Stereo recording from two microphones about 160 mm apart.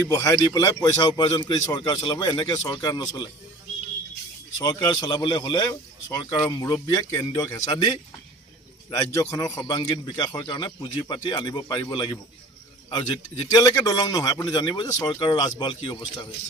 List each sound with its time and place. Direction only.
0.1 s a man's voice: 20° left (ahead or behind)
4.5 s a man's voice: 25° left (ahead or behind)
13.5 s a man's voice: 20° left (ahead or behind)